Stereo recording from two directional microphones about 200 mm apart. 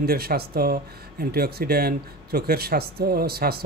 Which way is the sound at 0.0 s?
50° right (ahead or behind).